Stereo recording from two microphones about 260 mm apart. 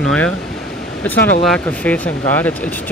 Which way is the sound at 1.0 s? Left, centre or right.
Centre.